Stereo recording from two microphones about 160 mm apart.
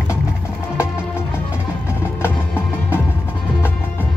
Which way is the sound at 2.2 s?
15° left (ahead or behind).